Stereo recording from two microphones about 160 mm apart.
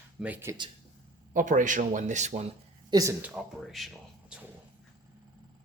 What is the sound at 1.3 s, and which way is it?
Speech, 55° right (ahead or behind).